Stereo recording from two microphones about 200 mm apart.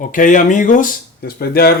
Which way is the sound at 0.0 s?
40° left (ahead or behind).